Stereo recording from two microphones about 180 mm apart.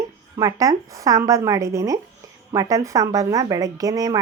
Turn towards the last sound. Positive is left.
turn(degrees=-20)  # may be behind; listen again after turning